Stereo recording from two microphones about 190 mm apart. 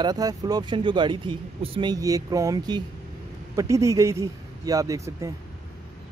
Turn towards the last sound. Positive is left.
turn(degrees=-15)  # may be behind; listen again after turning